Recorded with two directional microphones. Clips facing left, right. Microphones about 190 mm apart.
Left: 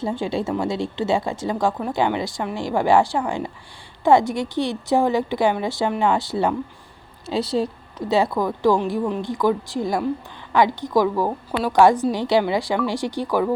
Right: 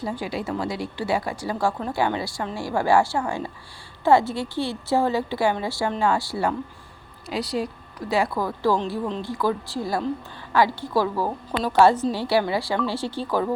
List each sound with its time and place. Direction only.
0.0 s a woman's voice: 25° left (ahead or behind)